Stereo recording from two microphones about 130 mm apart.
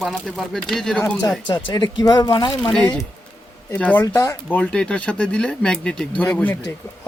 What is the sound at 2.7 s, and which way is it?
Speech, 10° left (ahead or behind).